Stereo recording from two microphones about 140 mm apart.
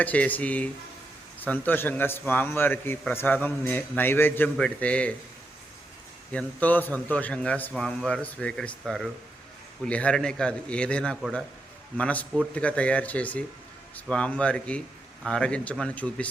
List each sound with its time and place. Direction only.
0.0 s a man's voice: 10° left (ahead or behind)
6.3 s a man's voice: 10° left (ahead or behind)